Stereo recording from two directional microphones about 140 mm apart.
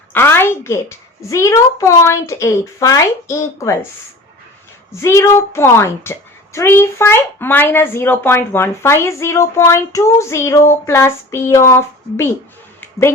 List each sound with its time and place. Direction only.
0.1 s a woman's voice: 15° left (ahead or behind)
4.9 s a woman's voice: 20° left (ahead or behind)